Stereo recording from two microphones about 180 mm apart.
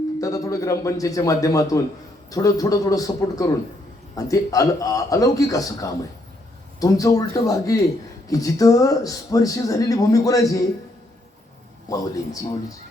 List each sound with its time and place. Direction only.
0.2 s speech: 20° left (ahead or behind)
11.9 s speech: 20° left (ahead or behind)